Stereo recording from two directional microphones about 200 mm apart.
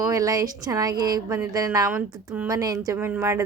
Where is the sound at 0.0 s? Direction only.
15° right (ahead or behind).